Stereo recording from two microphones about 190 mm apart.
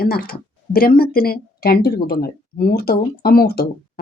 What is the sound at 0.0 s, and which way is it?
Speech, 50° left (ahead or behind).